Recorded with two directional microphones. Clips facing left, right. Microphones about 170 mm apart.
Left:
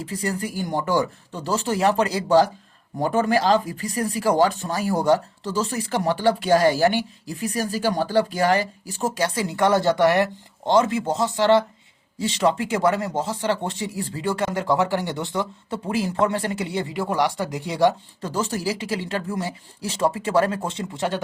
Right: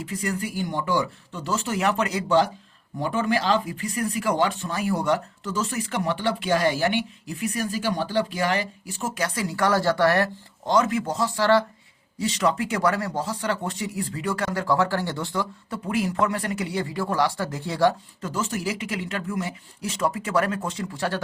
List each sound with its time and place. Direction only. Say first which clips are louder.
0.0 s speech: left 2 dB; 35° left (ahead or behind); by 17.9 s 20° left (ahead or behind)
18.2 s speech: left 3 dB; 35° left (ahead or behind)